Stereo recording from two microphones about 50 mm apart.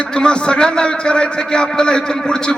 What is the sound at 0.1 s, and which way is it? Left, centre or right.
A man's voice, centre.